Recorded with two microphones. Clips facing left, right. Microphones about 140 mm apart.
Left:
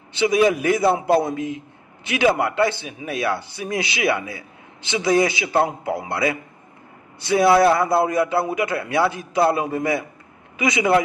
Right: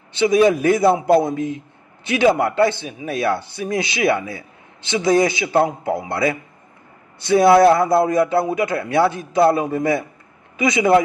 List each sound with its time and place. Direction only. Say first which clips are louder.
0.3 s a man's voice: right 3 dB; 35° right (ahead or behind)